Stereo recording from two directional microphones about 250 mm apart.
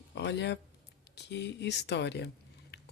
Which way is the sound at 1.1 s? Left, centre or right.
Left.